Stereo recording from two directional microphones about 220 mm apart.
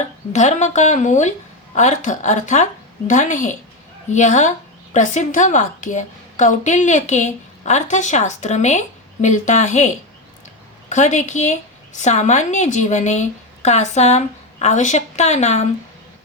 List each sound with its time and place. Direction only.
0.3 s a woman's voice: 30° left (ahead or behind)